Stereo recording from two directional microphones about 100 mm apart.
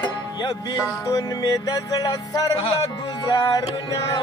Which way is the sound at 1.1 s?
40° left (ahead or behind).